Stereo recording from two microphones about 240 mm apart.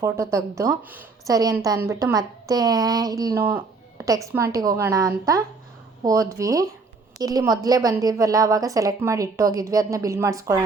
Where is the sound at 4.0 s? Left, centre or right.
Centre.